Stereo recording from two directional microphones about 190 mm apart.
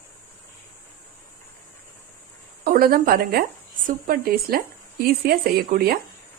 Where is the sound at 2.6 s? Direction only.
50° right (ahead or behind).